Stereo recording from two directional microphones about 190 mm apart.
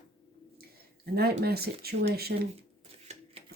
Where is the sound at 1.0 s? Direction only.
55° right (ahead or behind).